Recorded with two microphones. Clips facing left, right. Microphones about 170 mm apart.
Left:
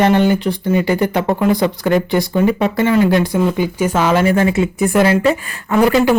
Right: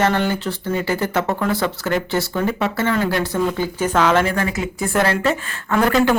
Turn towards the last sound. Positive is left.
turn(degrees=10)  # may be behind; listen again after turning